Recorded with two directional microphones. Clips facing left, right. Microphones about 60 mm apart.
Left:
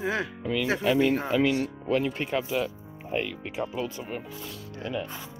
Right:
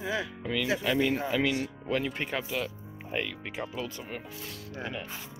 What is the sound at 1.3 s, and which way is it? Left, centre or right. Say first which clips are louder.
Speech: left 4 dB; left.